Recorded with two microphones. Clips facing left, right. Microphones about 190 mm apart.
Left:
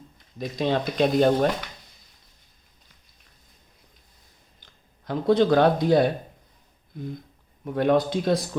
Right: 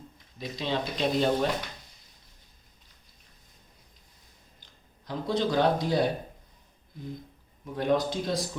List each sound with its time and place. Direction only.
0.3 s speech: 50° left (ahead or behind)
5.0 s speech: 60° left (ahead or behind)
7.6 s speech: 60° left (ahead or behind)